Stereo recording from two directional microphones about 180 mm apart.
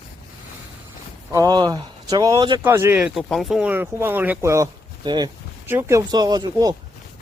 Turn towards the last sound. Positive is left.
turn(degrees=-25)  # may be behind; listen again after turning